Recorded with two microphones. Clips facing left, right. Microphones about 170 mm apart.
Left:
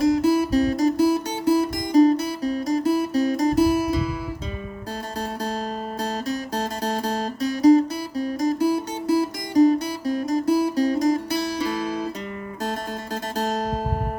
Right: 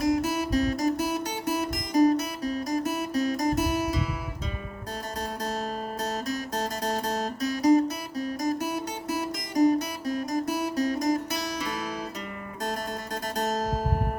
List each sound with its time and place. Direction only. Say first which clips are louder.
0.0 s music: left 7 dB; 30° left (ahead or behind)
6.0 s music: left 5 dB; 30° left (ahead or behind)
13.3 s music: left 3 dB; 30° left (ahead or behind)